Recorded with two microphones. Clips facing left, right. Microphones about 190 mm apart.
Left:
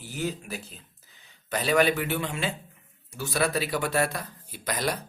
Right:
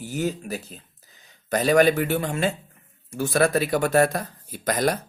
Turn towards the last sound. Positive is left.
turn(degrees=-45)  # may be behind; listen again after turning